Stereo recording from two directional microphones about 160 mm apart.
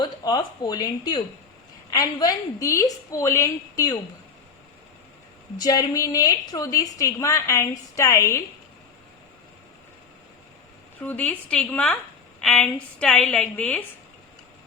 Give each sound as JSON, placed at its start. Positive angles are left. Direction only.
{"t": 0.0, "sound": "a woman's voice", "side_deg": 25}
{"t": 5.5, "sound": "a woman's voice", "side_deg": 25}
{"t": 11.0, "sound": "a woman's voice", "side_deg": 10}